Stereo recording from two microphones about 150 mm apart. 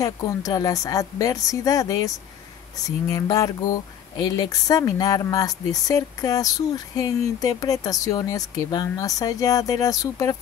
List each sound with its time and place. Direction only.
0.0 s speech: 25° left (ahead or behind)